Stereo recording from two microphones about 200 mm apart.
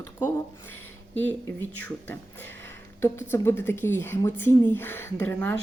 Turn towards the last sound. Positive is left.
turn(degrees=10)  # may be behind; listen again after turning